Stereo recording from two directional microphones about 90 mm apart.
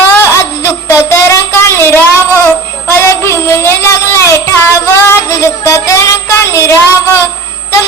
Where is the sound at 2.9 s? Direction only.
30° left (ahead or behind).